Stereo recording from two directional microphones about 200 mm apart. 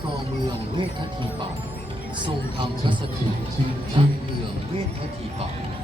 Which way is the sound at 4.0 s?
25° right (ahead or behind).